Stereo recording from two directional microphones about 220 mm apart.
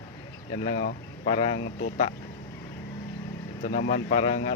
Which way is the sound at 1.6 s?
50° left (ahead or behind).